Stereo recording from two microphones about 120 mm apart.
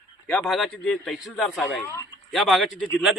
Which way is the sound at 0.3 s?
5° left (ahead or behind).